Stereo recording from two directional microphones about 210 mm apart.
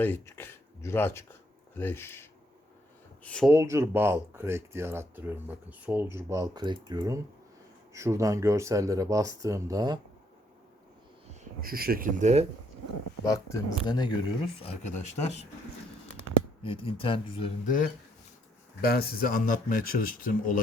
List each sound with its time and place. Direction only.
0.0 s speech: 10° left (ahead or behind)
3.2 s speech: 5° left (ahead or behind)
3.5 s speech: 15° right (ahead or behind)
11.6 s speech: 45° right (ahead or behind)
13.2 s speech: 15° left (ahead or behind)
14.6 s speech: 30° left (ahead or behind)
16.6 s speech: 25° left (ahead or behind)
18.8 s speech: 45° left (ahead or behind)